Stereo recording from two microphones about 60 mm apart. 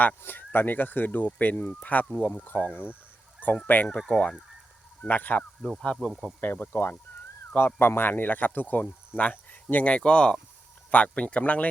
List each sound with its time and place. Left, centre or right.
0.2 s speech: left
4.0 s fowl: centre
5.0 s speech: left
5.8 s speech: centre
6.1 s speech: centre
6.4 s speech: left